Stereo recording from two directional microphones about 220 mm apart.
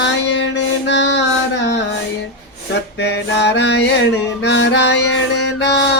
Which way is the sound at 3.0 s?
50° left (ahead or behind).